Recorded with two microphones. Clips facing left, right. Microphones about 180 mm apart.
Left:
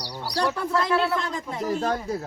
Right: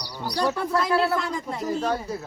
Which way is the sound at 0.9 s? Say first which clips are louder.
Right 1 dB; 40° right (ahead or behind).